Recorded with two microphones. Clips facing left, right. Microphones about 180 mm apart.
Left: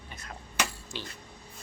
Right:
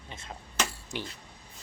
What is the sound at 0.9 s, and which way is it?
Speech, 15° right (ahead or behind).